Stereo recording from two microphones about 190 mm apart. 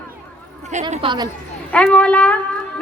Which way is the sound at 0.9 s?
25° right (ahead or behind).